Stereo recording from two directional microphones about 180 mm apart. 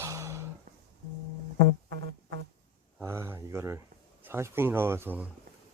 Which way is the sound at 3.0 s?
15° right (ahead or behind).